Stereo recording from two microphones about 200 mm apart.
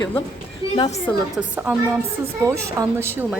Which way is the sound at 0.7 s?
25° left (ahead or behind).